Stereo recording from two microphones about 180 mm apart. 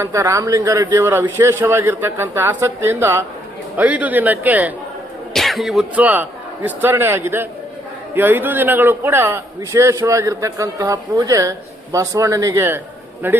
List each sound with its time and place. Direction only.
0.0 s a man's voice: 15° right (ahead or behind)